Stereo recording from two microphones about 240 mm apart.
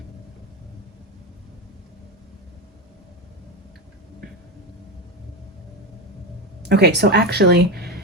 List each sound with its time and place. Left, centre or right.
6.7 s speech: right